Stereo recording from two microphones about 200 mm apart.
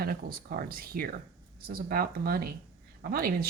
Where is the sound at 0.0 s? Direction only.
50° right (ahead or behind).